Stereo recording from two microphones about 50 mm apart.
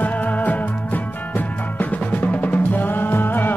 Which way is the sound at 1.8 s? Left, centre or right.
Left.